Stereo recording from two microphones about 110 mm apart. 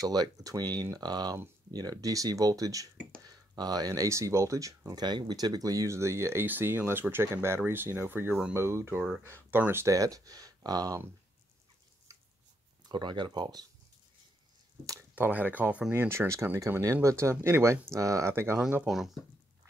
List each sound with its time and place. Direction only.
0.0 s speech: 35° right (ahead or behind)
12.8 s speech: 45° right (ahead or behind)
15.1 s speech: 15° right (ahead or behind)
18.9 s speech: centre (ahead or behind)